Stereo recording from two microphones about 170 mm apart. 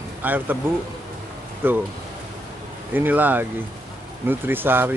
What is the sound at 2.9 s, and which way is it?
Speech, 10° right (ahead or behind).